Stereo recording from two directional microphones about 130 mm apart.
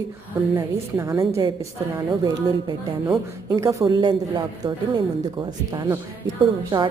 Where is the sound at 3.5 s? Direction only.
25° right (ahead or behind).